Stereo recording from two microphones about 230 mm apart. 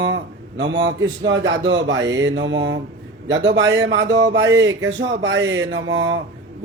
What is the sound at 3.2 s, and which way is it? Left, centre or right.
Speech, right.